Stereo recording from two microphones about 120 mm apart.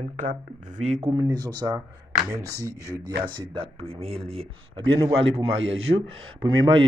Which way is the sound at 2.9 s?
45° right (ahead or behind).